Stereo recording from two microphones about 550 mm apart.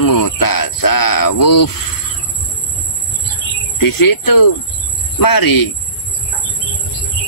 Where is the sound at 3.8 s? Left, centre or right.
Left.